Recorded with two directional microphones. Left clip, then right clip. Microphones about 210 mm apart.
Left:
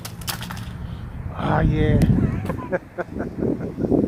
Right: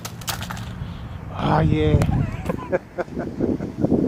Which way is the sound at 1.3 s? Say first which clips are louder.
Right 2 dB; 20° right (ahead or behind).